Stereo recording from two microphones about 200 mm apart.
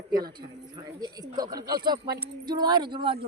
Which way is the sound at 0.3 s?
20° right (ahead or behind).